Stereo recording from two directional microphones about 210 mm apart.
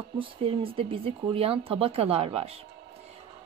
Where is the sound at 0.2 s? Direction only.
25° right (ahead or behind).